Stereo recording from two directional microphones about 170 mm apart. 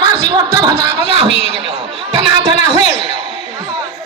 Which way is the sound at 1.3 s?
35° left (ahead or behind).